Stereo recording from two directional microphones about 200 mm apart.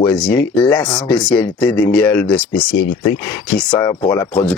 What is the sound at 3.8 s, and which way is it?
Speech, 20° left (ahead or behind).